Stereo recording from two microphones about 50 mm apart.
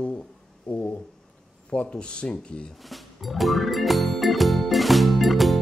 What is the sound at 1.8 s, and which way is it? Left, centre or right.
Speech, centre.